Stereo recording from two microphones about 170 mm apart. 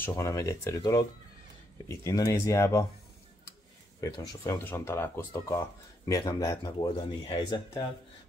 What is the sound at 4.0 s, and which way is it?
Speech, 20° left (ahead or behind).